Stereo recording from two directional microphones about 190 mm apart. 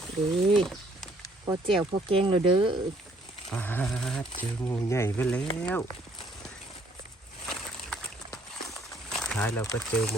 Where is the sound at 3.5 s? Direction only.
10° left (ahead or behind).